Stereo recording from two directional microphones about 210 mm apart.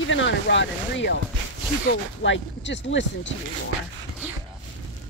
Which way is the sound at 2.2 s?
60° left (ahead or behind).